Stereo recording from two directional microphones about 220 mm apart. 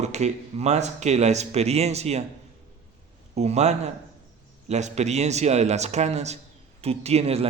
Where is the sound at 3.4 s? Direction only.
30° right (ahead or behind).